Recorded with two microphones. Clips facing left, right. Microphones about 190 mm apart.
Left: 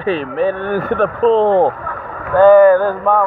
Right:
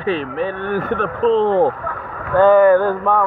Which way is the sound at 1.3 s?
35° left (ahead or behind).